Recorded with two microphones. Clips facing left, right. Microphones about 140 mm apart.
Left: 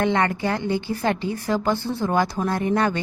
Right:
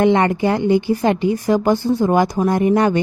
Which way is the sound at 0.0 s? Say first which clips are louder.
Right 7 dB; 20° right (ahead or behind).